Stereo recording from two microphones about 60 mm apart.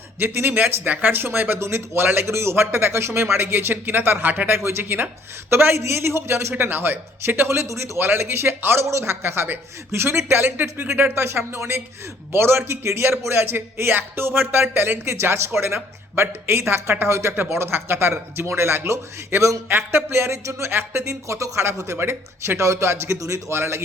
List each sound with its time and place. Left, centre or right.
0.2 s a man's voice: right
6.5 s speech: right
7.4 s a man's voice: right
19.4 s speech: right
19.6 s a man's voice: right
20.7 s speech: right
21.0 s a man's voice: right